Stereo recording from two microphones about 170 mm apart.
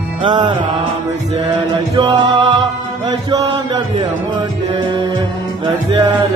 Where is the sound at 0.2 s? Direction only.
25° right (ahead or behind).